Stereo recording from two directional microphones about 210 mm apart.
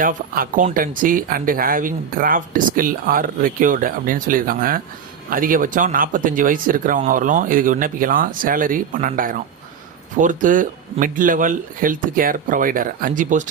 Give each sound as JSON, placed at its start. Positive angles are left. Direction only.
{"t": 0.0, "sound": "speech", "side_deg": -40}